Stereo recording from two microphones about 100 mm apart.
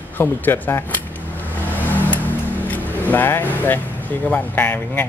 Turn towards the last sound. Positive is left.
turn(degrees=20)  # may be behind; listen again after turning